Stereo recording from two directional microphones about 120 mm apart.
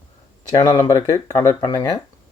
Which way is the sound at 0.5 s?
35° left (ahead or behind).